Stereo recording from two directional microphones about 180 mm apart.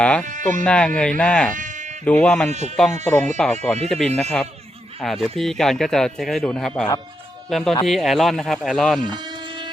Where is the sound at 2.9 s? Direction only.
10° left (ahead or behind).